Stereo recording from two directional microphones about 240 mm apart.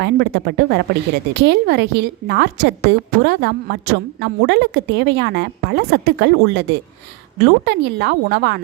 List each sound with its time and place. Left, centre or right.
0.0 s a woman's voice: right